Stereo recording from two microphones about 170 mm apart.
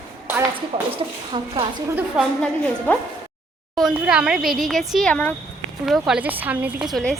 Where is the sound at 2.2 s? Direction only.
5° right (ahead or behind).